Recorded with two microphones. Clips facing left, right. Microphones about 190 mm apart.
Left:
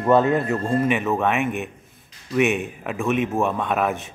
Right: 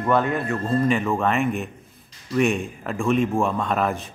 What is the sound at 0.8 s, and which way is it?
Speech, 5° left (ahead or behind).